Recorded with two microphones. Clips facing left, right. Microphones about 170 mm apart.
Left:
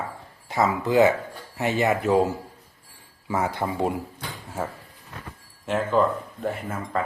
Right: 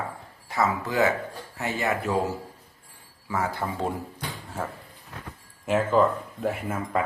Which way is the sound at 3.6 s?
15° left (ahead or behind).